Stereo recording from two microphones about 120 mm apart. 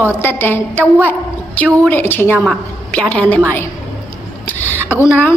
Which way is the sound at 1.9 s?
20° left (ahead or behind).